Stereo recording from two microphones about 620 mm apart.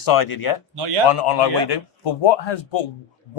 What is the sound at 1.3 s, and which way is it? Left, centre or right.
Speech, left.